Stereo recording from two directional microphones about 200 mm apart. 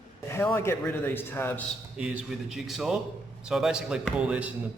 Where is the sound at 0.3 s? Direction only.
10° left (ahead or behind).